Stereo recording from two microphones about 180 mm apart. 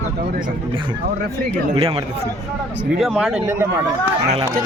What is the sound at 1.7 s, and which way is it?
Speech, 30° right (ahead or behind).